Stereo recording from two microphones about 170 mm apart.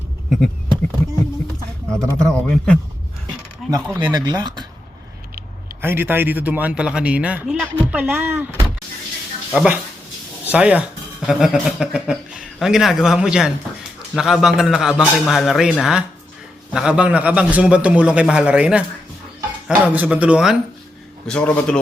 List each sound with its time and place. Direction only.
2.0 s speech: 5° left (ahead or behind)
3.6 s a sound: centre (ahead or behind)
3.9 s speech: 20° right (ahead or behind)
5.8 s a man's voice: 10° right (ahead or behind)
21.2 s a man's voice: 5° left (ahead or behind)